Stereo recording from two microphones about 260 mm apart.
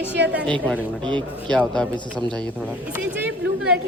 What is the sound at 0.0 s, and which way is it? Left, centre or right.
Speech, centre.